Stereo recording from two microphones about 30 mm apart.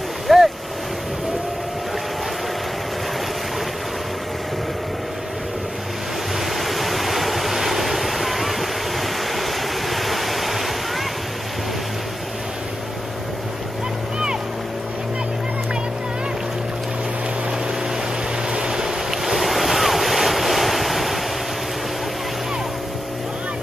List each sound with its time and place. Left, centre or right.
0.3 s boat: centre
6.5 s vehicle: centre
18.5 s waves: right; by 21.2 s centre